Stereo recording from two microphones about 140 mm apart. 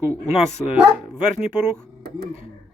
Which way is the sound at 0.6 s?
5° right (ahead or behind).